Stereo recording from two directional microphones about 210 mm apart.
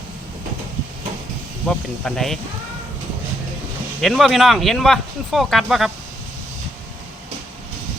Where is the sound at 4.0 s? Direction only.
Centre (ahead or behind).